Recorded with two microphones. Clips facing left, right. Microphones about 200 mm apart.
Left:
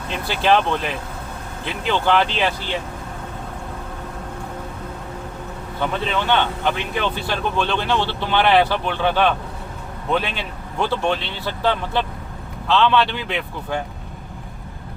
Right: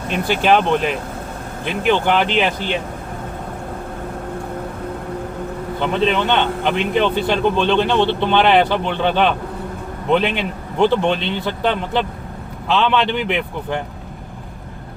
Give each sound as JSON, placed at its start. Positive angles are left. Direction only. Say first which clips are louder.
{"t": 0.3, "sound": "speech", "louder": "right 3 dB", "side_deg": -15}
{"t": 5.8, "sound": "speech", "louder": "right 5 dB", "side_deg": -20}
{"t": 10.3, "sound": "speech", "louder": "right 5 dB", "side_deg": -20}